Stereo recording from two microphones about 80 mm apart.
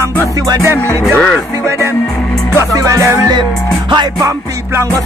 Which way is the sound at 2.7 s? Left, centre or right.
Right.